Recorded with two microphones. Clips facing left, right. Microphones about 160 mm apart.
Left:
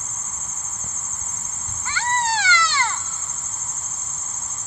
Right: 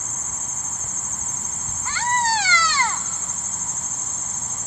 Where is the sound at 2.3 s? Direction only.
40° right (ahead or behind).